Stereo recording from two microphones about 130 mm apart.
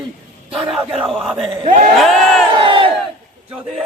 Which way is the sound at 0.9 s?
45° right (ahead or behind).